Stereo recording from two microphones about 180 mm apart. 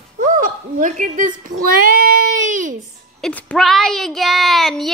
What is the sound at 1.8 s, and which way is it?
Child singing, 50° right (ahead or behind).